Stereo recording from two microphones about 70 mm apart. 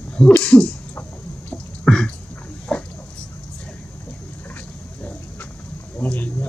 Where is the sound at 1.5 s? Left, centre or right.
Centre.